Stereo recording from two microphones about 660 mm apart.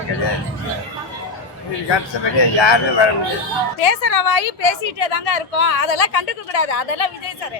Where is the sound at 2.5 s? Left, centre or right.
Left.